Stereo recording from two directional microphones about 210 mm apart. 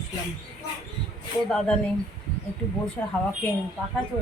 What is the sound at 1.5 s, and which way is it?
Speech, 5° left (ahead or behind).